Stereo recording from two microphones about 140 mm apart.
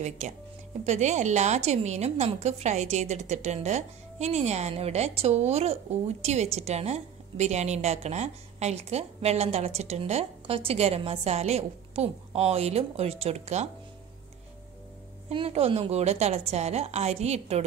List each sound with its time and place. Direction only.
0.8 s a woman's voice: 55° right (ahead or behind)
15.3 s a woman's voice: 45° right (ahead or behind)